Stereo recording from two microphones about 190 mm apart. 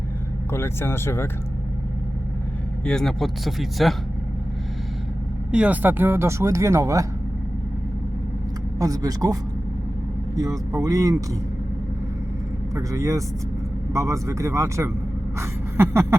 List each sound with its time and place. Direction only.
0.5 s speech: 15° left (ahead or behind)
2.8 s speech: 5° left (ahead or behind)
5.5 s speech: 5° right (ahead or behind)
8.8 s speech: 20° right (ahead or behind)
12.7 s speech: 15° right (ahead or behind)
15.4 s a sound: 15° right (ahead or behind)